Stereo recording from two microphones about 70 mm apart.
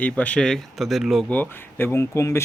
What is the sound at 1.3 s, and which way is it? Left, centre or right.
Speech, left.